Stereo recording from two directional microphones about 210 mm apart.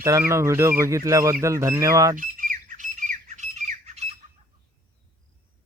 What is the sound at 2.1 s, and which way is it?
Squawk, 40° right (ahead or behind).